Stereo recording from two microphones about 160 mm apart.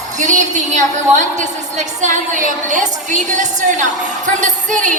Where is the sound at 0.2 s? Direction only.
50° right (ahead or behind).